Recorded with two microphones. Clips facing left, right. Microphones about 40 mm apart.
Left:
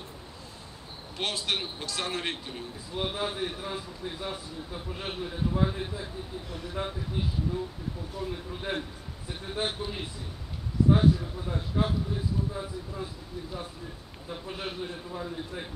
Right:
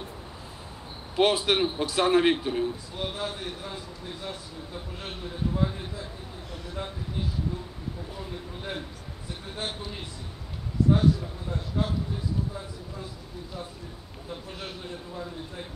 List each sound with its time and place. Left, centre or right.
1.1 s a man's voice: right
2.9 s a man's voice: centre
8.3 s a man's voice: centre
14.3 s a man's voice: centre